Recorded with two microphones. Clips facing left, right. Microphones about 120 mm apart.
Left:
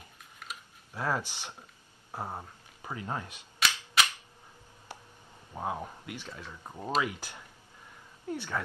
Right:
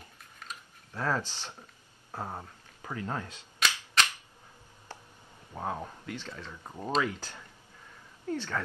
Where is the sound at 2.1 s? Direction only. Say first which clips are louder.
Even; 10° left (ahead or behind).